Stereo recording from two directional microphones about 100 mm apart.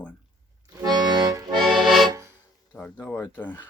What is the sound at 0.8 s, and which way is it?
Accordion, 45° right (ahead or behind).